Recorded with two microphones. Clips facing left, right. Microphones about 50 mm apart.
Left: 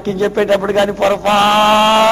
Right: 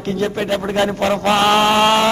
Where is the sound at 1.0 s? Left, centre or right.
Left.